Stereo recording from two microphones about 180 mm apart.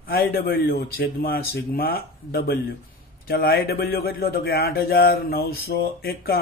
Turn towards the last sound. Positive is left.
turn(degrees=55)  # may be behind; listen again after turning